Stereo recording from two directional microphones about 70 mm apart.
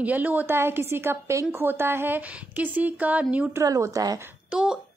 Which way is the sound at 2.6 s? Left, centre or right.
Right.